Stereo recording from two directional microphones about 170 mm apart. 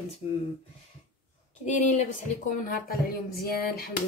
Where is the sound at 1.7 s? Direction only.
45° left (ahead or behind).